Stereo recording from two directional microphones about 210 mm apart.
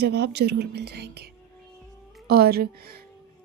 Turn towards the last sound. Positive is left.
turn(degrees=-45)  # may be behind; listen again after turning